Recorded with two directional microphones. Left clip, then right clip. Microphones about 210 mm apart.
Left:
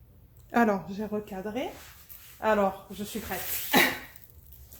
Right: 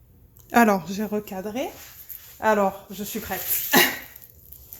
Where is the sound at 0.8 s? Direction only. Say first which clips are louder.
Right 5 dB; 55° right (ahead or behind).